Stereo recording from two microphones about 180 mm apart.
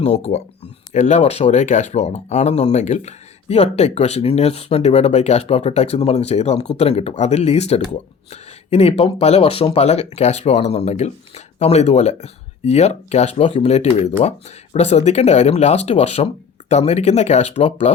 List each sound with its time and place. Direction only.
0.0 s speech: 35° left (ahead or behind)